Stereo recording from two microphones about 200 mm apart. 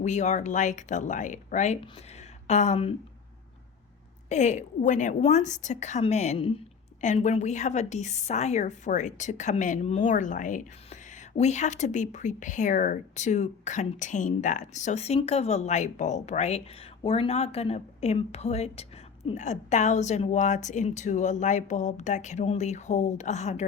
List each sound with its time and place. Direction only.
0.0 s a woman's voice: 35° left (ahead or behind)
4.3 s a woman's voice: 35° left (ahead or behind)